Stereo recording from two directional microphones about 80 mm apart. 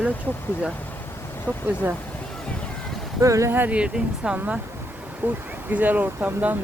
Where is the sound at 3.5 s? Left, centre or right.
Centre.